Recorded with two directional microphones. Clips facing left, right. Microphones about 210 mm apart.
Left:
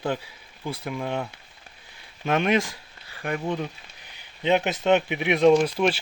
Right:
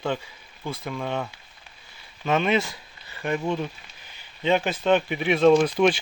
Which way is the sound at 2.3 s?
10° left (ahead or behind).